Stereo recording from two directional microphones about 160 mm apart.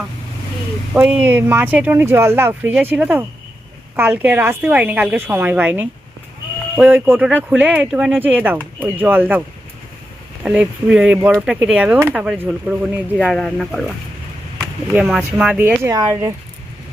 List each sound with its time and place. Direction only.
0.9 s speech: 10° right (ahead or behind)
10.4 s speech: 10° right (ahead or behind)
14.9 s speech: 5° right (ahead or behind)
15.8 s speech: 20° right (ahead or behind)